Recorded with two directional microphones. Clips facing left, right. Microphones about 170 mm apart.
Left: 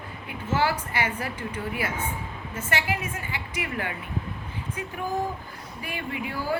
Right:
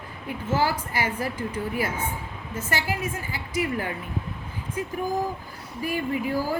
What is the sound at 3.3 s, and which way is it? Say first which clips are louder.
Speech: right 6 dB; 40° right (ahead or behind).